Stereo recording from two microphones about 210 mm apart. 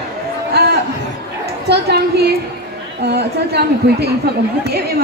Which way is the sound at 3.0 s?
50° right (ahead or behind).